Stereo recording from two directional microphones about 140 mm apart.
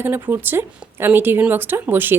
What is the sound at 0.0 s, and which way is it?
Speech, 15° right (ahead or behind).